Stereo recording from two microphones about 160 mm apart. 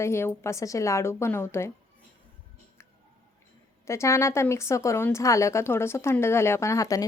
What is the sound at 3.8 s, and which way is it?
Speech, 15° left (ahead or behind).